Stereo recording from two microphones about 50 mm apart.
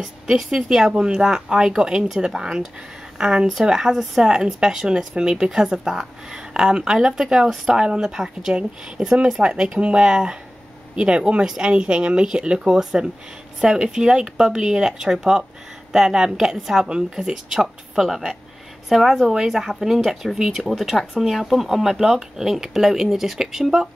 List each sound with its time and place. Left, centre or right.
0.0 s a woman's voice: centre
3.9 s speech: centre
4.2 s speech: centre
21.2 s speech: centre